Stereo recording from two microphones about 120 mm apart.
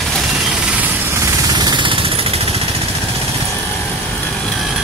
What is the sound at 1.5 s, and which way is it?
Vehicle, 35° right (ahead or behind).